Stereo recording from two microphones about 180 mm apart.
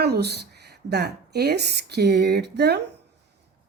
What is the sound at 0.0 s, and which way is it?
Speech, 65° right (ahead or behind).